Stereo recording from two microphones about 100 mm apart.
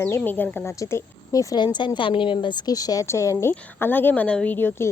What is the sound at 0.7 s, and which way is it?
Speech, 30° left (ahead or behind).